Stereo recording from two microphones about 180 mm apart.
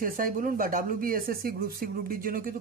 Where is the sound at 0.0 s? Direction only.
50° right (ahead or behind).